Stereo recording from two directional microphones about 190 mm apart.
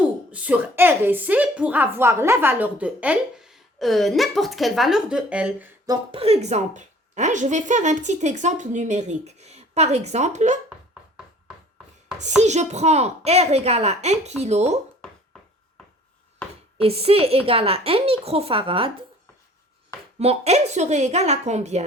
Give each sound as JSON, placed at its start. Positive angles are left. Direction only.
{"t": 0.3, "sound": "a woman's voice", "side_deg": -10}
{"t": 5.8, "sound": "a woman's voice", "side_deg": -25}
{"t": 12.4, "sound": "a woman's voice", "side_deg": -35}
{"t": 16.7, "sound": "a woman's voice", "side_deg": -30}
{"t": 20.1, "sound": "a woman's voice", "side_deg": -35}